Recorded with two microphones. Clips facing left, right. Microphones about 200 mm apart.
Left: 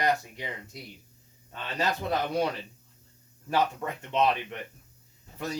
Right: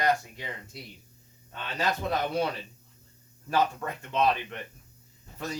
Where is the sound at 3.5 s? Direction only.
20° left (ahead or behind).